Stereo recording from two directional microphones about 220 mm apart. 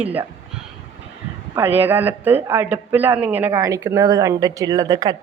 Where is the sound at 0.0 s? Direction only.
5° right (ahead or behind).